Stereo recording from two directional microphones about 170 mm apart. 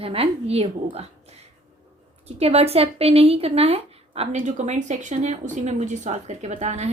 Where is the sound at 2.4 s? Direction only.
35° right (ahead or behind).